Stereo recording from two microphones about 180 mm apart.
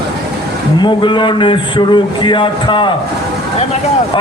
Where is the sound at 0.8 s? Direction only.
25° left (ahead or behind).